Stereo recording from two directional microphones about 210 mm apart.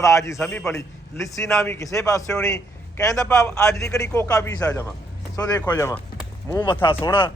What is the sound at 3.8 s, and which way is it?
A man's voice, 15° left (ahead or behind).